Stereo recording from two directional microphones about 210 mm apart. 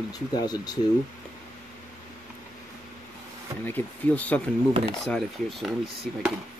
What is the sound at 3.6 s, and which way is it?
Speech, 10° left (ahead or behind).